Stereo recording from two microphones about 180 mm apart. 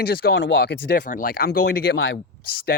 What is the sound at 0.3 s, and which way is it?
Speech, 80° left.